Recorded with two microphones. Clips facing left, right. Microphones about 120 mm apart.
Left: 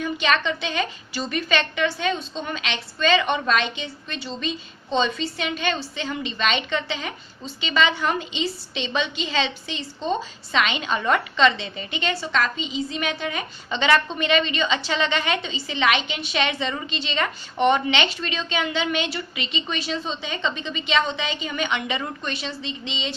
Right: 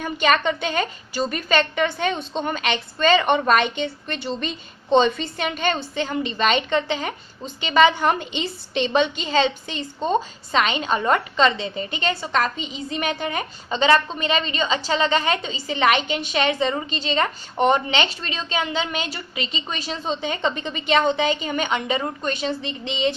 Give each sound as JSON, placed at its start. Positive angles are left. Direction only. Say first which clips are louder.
{"t": 0.0, "sound": "a woman's voice", "louder": "right 3 dB", "side_deg": -50}